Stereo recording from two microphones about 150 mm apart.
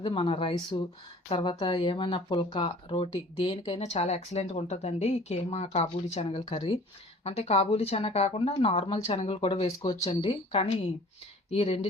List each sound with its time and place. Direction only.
0.0 s speech: 35° left (ahead or behind)